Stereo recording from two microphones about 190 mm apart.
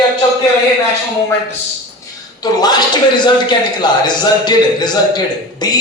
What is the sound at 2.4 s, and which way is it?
A man's voice, 20° left (ahead or behind).